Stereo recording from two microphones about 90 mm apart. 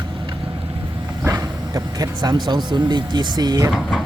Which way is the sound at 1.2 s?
40° right (ahead or behind).